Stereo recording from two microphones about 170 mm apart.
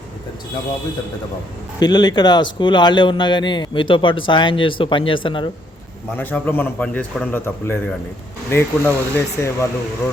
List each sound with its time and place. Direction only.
1.8 s a man's voice: 25° left (ahead or behind)
6.1 s a man's voice: 10° left (ahead or behind)